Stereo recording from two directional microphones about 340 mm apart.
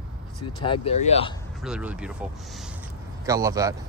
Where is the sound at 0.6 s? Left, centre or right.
Centre.